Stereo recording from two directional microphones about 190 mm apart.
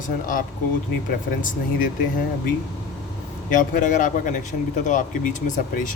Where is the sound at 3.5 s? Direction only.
45° left (ahead or behind).